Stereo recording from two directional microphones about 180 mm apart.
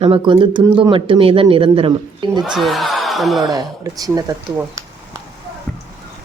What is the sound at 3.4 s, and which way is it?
Speech, 20° right (ahead or behind).